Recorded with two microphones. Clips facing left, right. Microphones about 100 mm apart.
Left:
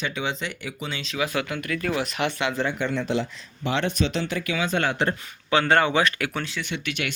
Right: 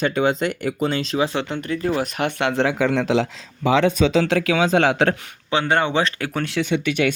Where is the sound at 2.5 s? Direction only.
85° right.